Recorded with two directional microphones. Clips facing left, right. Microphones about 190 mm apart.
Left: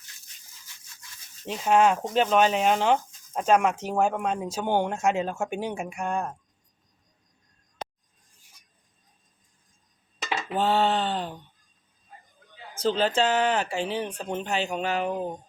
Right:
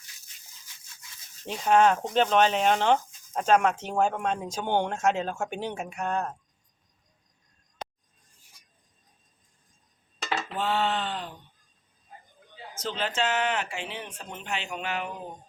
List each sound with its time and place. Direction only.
1.5 s speech: 5° left (ahead or behind)
10.6 s speech: 35° left (ahead or behind)
12.7 s speech: 35° left (ahead or behind)